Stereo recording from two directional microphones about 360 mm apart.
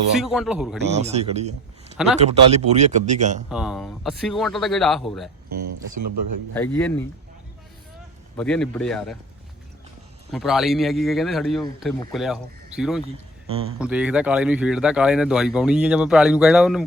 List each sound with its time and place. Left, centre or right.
0.2 s speech: centre
0.9 s speech: centre
3.5 s speech: centre
6.5 s speech: centre
8.4 s speech: centre
10.3 s speech: centre
13.5 s speech: centre
13.7 s speech: centre